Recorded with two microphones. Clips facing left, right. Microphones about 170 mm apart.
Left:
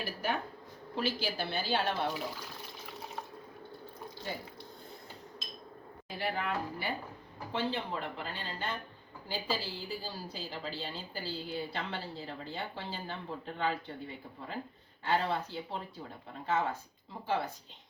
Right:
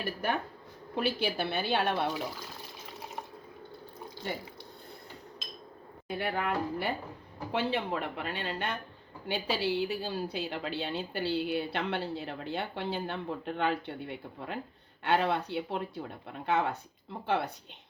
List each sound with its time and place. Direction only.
0.9 s a woman's voice: 60° right (ahead or behind)
6.1 s a woman's voice: 60° right (ahead or behind)